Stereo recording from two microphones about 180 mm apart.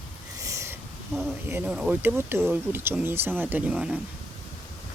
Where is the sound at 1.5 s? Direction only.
10° right (ahead or behind).